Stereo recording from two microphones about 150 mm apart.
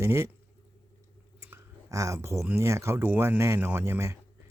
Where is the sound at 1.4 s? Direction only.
15° right (ahead or behind).